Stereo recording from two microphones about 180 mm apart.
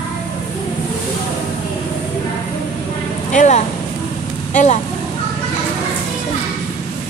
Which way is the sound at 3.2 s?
40° left (ahead or behind).